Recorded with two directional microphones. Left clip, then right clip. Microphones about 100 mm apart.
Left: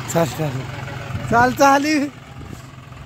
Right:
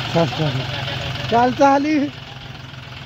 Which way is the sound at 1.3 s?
20° left (ahead or behind).